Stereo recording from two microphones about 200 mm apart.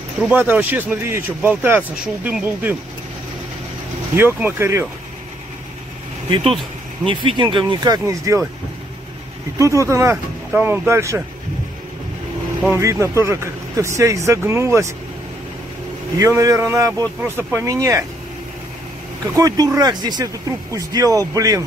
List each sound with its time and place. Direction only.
0.3 s speech: 10° right (ahead or behind)
4.1 s speech: 10° right (ahead or behind)
7.1 s speech: 25° right (ahead or behind)
9.6 s speech: 15° right (ahead or behind)
12.6 s speech: 15° right (ahead or behind)
16.2 s speech: 15° right (ahead or behind)
19.3 s speech: 15° right (ahead or behind)